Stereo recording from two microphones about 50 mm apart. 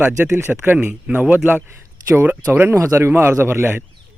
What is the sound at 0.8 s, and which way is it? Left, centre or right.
Speech, right.